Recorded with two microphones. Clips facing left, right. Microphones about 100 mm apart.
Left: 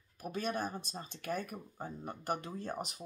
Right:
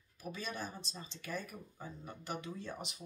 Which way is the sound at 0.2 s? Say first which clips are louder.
Left 6 dB; 50° left (ahead or behind).